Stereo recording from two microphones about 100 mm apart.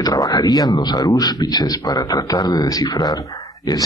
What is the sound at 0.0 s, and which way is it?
Speech, 40° left (ahead or behind).